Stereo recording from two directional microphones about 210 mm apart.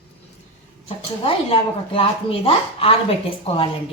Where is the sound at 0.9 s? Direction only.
25° left (ahead or behind).